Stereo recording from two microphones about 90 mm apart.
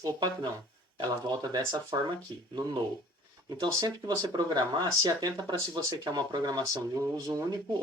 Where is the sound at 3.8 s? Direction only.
45° right (ahead or behind).